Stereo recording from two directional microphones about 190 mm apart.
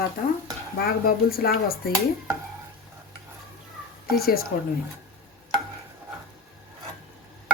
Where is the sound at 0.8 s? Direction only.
55° left (ahead or behind).